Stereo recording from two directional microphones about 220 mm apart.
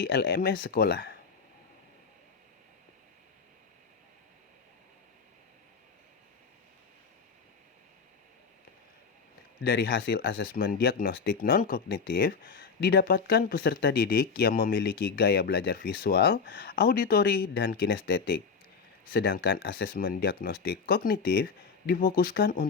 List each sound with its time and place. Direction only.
0.0 s speech: 45° left (ahead or behind)
9.6 s speech: 45° left (ahead or behind)